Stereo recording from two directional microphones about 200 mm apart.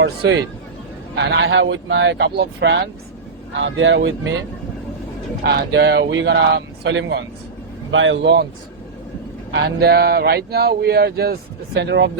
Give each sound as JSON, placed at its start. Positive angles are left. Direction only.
{"t": 0.0, "sound": "speech", "side_deg": -60}
{"t": 3.6, "sound": "speech", "side_deg": -70}
{"t": 5.4, "sound": "speech", "side_deg": -55}
{"t": 9.5, "sound": "speech", "side_deg": -60}